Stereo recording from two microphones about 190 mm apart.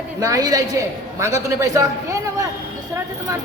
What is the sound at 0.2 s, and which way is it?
A woman's voice, 20° right (ahead or behind).